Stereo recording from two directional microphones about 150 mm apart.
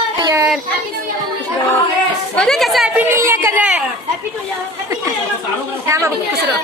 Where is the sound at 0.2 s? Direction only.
20° right (ahead or behind).